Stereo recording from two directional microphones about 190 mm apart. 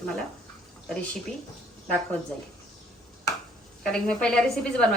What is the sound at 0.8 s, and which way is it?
Speech, 5° left (ahead or behind).